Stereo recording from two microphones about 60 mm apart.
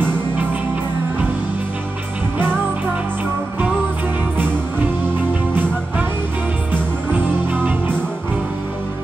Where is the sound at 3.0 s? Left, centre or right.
Right.